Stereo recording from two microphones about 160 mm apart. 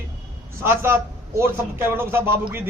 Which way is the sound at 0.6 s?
15° right (ahead or behind).